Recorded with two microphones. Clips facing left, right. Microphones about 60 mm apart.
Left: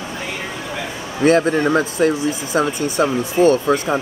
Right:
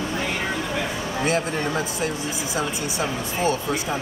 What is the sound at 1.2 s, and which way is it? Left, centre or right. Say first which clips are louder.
Speech: left 11 dB; left.